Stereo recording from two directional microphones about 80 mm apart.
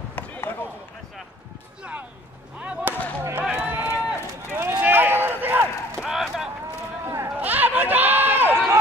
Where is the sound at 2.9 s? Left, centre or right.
Right.